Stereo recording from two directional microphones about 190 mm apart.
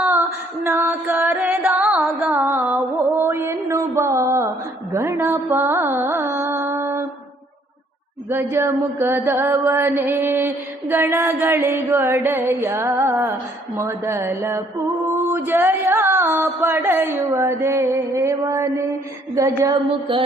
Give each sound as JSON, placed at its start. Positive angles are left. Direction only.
{"t": 0.6, "sound": "music", "side_deg": -10}
{"t": 4.9, "sound": "carnatic music", "side_deg": -15}
{"t": 8.3, "sound": "chant", "side_deg": -10}
{"t": 15.1, "sound": "a sound", "side_deg": -10}